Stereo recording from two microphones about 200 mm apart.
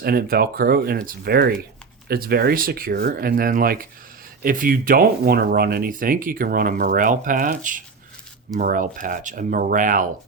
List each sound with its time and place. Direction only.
0.0 s speech: 50° right (ahead or behind)